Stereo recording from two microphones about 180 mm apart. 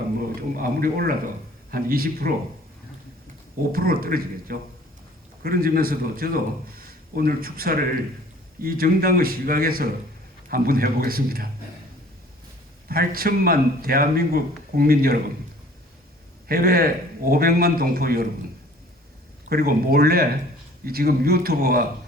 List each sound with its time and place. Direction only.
0.5 s a man's voice: 55° right (ahead or behind)
3.7 s a man's voice: 55° right (ahead or behind)
12.9 s a man's voice: 55° right (ahead or behind)
16.5 s a man's voice: 55° right (ahead or behind)
19.5 s a man's voice: 60° right (ahead or behind)